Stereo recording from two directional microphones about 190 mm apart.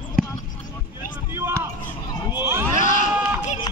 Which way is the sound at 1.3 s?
15° right (ahead or behind).